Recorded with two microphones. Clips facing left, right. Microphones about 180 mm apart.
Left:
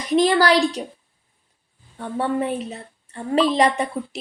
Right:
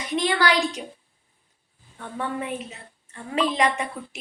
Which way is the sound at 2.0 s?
35° left (ahead or behind).